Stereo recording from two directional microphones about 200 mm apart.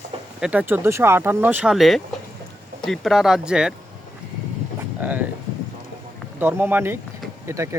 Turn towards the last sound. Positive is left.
turn(degrees=-15)  # may be behind; listen again after turning